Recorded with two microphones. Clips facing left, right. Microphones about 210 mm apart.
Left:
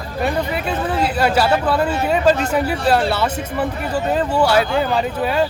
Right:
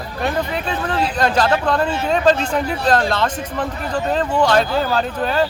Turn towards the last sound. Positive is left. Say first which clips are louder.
# left 1 dB
turn(degrees=5)  # may be behind; listen again after turning